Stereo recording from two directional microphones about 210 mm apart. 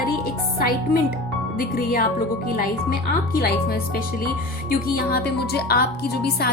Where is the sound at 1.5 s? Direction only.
45° left (ahead or behind).